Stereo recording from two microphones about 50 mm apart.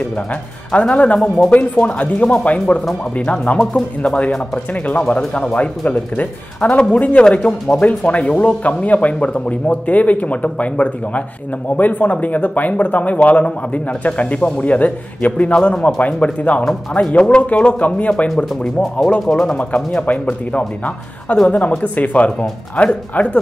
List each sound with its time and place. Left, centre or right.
0.7 s speech: left
5.4 s speech: left
7.6 s speech: centre
8.0 s speech: left
18.6 s speech: centre
19.4 s speech: centre
20.1 s speech: left